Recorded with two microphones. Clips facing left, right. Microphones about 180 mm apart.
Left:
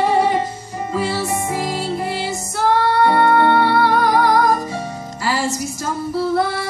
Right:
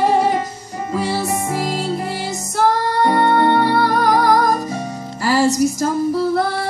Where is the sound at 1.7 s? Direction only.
45° right (ahead or behind).